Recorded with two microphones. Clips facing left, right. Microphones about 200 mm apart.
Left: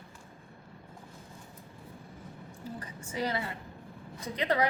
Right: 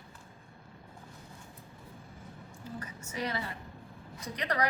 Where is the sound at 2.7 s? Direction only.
30° left (ahead or behind).